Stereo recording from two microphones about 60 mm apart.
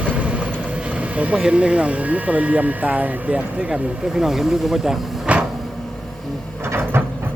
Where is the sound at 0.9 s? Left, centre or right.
Right.